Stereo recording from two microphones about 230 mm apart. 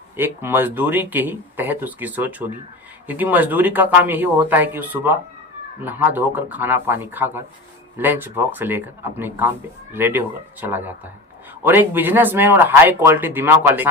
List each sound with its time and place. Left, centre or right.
0.2 s speech: centre